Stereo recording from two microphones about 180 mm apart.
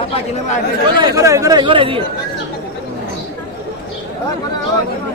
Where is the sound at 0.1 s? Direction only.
40° left (ahead or behind).